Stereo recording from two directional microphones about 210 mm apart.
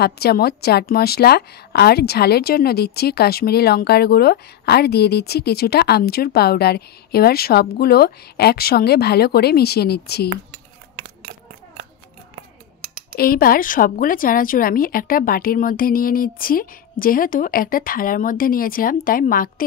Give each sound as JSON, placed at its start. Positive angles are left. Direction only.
{"t": 0.0, "sound": "a woman's voice", "side_deg": 50}
{"t": 13.1, "sound": "a woman's voice", "side_deg": 45}